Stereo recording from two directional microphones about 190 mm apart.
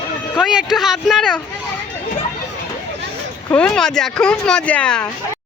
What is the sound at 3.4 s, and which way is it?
Speech, 5° left (ahead or behind).